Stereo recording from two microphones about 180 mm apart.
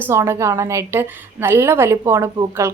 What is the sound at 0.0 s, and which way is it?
A woman's voice, 15° right (ahead or behind).